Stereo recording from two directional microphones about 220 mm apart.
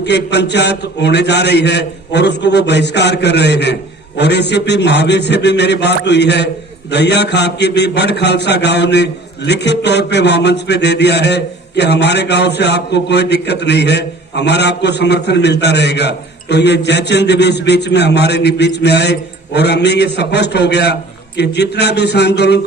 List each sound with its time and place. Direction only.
0.0 s a man's voice: 50° left (ahead or behind)